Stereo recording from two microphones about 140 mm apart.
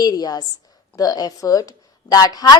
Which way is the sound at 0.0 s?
25° left (ahead or behind).